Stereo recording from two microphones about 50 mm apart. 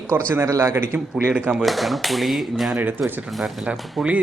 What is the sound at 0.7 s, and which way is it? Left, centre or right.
Speech, right.